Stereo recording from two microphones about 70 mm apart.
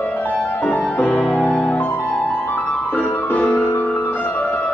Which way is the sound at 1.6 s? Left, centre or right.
Left.